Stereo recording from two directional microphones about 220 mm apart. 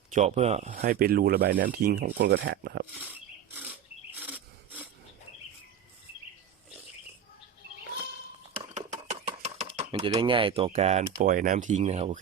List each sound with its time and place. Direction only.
0.1 s speech: 30° right (ahead or behind); by 2.8 s 45° right (ahead or behind)
3.0 s wild animals: 10° right (ahead or behind)
4.1 s snort: 5° right (ahead or behind)
8.7 s a sound: 30° right (ahead or behind)
9.9 s speech: 15° right (ahead or behind)